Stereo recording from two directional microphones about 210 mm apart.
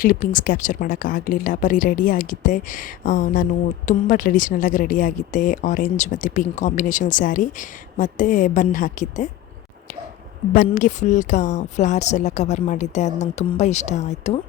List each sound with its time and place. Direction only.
0.0 s speech: 40° left (ahead or behind)
10.7 s speech: 35° left (ahead or behind)